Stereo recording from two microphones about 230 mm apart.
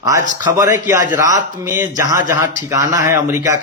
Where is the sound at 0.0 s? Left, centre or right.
Centre.